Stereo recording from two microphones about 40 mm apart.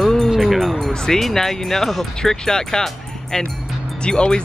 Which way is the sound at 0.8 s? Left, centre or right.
Centre.